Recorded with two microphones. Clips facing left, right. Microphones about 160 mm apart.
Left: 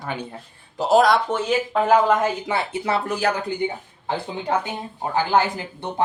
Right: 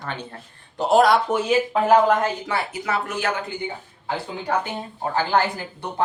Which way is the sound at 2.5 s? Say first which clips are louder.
Left 2 dB; 25° left (ahead or behind).